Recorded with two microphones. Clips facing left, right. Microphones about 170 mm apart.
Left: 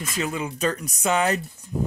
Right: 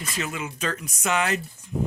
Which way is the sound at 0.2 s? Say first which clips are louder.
Left 5 dB; 35° left (ahead or behind).